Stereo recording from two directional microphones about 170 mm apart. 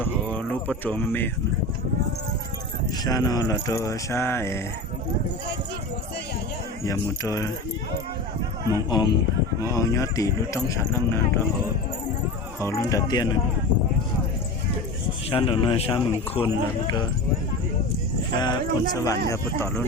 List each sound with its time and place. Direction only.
0.0 s a sound: 10° left (ahead or behind)
3.0 s speech: 20° left (ahead or behind)
6.8 s speech: 20° left (ahead or behind)
8.9 s speech: 25° left (ahead or behind)
12.5 s speech: 15° left (ahead or behind)
15.3 s speech: 30° left (ahead or behind)
18.3 s speech: 25° left (ahead or behind)